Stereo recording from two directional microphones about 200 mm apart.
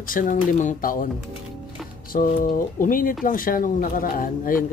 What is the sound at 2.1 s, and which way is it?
Speech, 45° left (ahead or behind).